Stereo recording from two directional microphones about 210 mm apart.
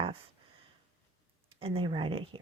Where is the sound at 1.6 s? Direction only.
25° right (ahead or behind).